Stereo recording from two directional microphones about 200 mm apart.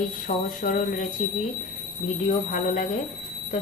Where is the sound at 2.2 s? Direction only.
40° left (ahead or behind).